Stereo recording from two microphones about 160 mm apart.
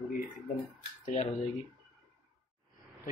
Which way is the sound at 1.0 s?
45° left (ahead or behind).